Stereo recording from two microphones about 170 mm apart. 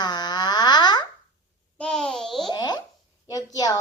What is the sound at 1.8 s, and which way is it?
Speech, 5° left (ahead or behind).